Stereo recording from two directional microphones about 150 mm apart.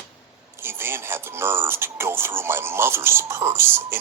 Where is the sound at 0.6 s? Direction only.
15° right (ahead or behind).